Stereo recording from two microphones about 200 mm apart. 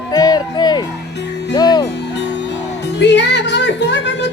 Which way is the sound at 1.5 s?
20° left (ahead or behind).